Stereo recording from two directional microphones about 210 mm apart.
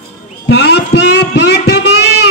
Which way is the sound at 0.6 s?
50° left (ahead or behind).